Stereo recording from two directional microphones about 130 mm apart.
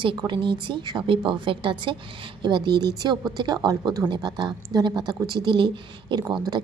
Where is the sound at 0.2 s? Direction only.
40° right (ahead or behind).